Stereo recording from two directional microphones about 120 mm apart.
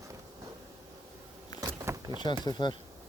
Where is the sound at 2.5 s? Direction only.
40° left (ahead or behind).